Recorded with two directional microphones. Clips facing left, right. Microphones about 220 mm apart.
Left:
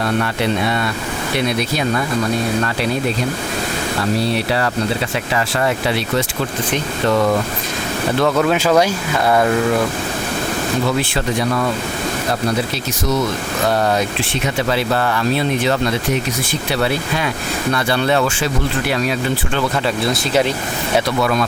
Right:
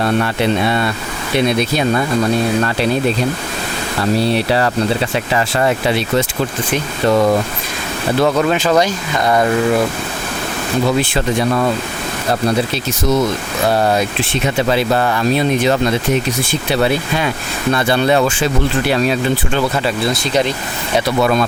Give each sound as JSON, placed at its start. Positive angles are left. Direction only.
{"t": 0.6, "sound": "speech", "side_deg": -30}
{"t": 5.3, "sound": "speech", "side_deg": -25}
{"t": 8.2, "sound": "speech", "side_deg": 0}
{"t": 13.7, "sound": "speech", "side_deg": -10}
{"t": 18.9, "sound": "speech", "side_deg": -30}
{"t": 20.1, "sound": "speech", "side_deg": 5}
{"t": 21.2, "sound": "speech", "side_deg": -25}